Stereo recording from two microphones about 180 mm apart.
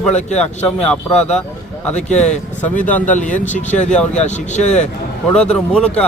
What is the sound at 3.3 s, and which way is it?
Speech, 45° left (ahead or behind).